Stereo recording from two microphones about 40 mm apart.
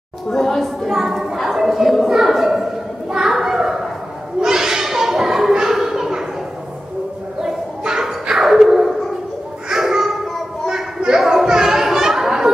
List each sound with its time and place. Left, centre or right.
0.3 s a woman's voice: centre
0.8 s a child's voice: centre
3.1 s children playing: centre
4.4 s a sound: centre
7.4 s a sound: centre
11.1 s children playing: centre